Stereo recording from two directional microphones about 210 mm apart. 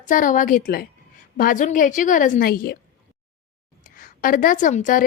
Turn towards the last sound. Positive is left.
turn(degrees=35)  # may be behind; listen again after turning